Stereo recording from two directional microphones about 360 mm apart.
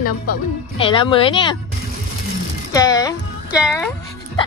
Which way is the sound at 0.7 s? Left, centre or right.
Centre.